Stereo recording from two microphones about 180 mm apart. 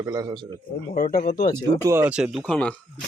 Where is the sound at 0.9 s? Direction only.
50° left (ahead or behind).